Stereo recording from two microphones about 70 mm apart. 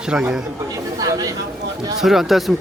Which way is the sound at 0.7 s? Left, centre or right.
Right.